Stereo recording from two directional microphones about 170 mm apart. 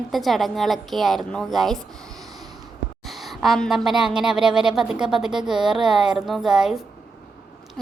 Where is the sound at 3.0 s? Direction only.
Centre (ahead or behind).